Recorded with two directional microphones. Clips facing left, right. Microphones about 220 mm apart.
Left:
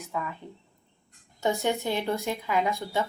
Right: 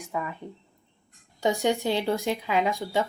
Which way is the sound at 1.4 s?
15° right (ahead or behind).